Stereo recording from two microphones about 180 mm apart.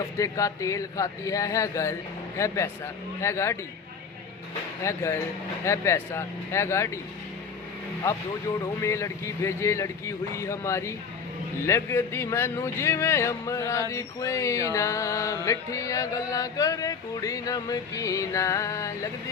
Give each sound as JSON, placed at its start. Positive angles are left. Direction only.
{"t": 0.2, "sound": "music", "side_deg": 20}
{"t": 4.8, "sound": "music", "side_deg": 15}
{"t": 8.6, "sound": "music", "side_deg": 15}